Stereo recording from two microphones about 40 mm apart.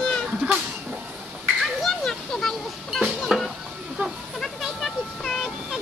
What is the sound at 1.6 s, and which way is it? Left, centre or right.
Children playing, centre.